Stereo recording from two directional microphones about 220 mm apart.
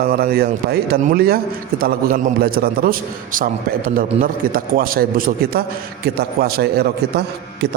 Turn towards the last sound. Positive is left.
turn(degrees=-45)  # may be behind; listen again after turning